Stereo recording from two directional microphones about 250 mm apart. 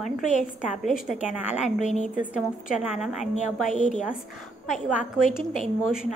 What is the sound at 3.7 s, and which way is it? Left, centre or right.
Speech, left.